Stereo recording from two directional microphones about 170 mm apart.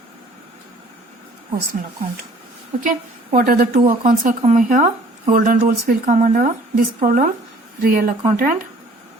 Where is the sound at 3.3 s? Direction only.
55° right (ahead or behind).